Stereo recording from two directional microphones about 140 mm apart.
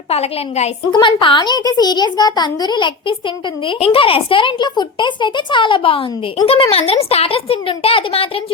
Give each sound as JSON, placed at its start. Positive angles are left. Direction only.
{"t": 0.1, "sound": "speech", "side_deg": 50}
{"t": 0.9, "sound": "speech", "side_deg": 35}